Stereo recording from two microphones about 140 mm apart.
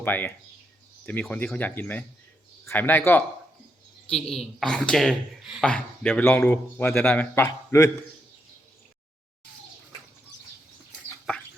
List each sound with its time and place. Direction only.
0.0 s a man's voice: 15° left (ahead or behind)
4.1 s a man's voice: 5° left (ahead or behind); by 7.9 s 20° left (ahead or behind)